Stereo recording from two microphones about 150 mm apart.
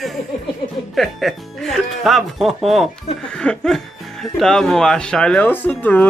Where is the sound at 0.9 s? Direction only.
Centre (ahead or behind).